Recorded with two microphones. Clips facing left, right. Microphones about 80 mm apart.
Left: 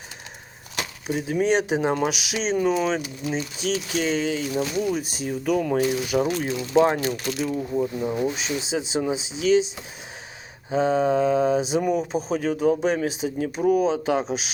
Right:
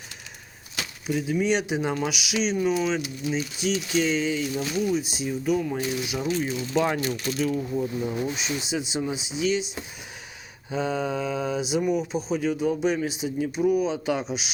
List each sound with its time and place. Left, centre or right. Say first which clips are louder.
1.3 s speech: left 4 dB; left
5.4 s speech: left 4 dB; left
6.7 s speech: left 5 dB; left
7.5 s speech: left 2 dB; centre
8.4 s speech: left 2 dB; left
10.7 s speech: left 6 dB; left
13.1 s speech: left 2 dB; left